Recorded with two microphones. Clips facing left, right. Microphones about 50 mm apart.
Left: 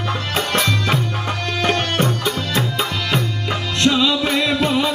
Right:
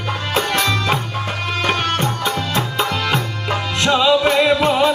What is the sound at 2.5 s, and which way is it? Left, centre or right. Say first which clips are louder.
Music: right 1 dB; centre.